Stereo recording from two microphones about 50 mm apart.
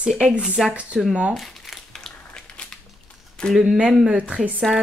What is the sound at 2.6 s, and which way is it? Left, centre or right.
Crushing, left.